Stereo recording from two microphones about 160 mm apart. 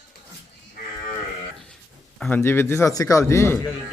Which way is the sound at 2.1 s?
5° left (ahead or behind).